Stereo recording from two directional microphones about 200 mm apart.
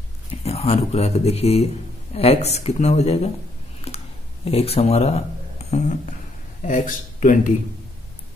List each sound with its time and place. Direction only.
0.4 s speech: 30° left (ahead or behind)
3.8 s a sound: 30° left (ahead or behind)
4.5 s speech: 30° left (ahead or behind)